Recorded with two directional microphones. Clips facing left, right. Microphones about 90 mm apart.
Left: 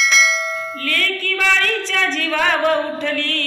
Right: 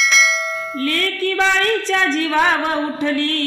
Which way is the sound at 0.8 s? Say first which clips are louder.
Right 3 dB; 20° right (ahead or behind).